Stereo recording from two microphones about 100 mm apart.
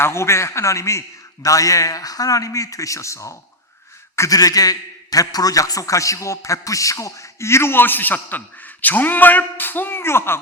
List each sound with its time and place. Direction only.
0.0 s a man's voice: 25° left (ahead or behind)